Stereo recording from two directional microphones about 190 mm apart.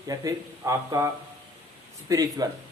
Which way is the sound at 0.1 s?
15° right (ahead or behind).